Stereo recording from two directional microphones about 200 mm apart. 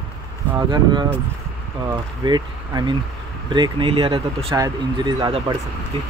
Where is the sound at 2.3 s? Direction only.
20° right (ahead or behind).